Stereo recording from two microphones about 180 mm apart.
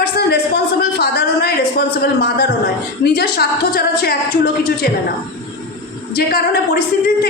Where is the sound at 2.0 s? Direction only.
65° left (ahead or behind).